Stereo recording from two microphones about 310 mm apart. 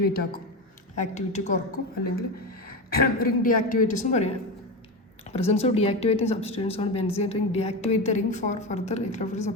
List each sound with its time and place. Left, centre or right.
0.0 s a woman's voice: left